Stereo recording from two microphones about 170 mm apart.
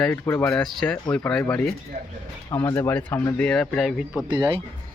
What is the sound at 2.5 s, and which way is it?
Speech, 20° left (ahead or behind).